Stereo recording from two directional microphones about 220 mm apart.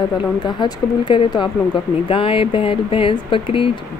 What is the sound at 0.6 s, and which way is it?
Speech, 20° left (ahead or behind).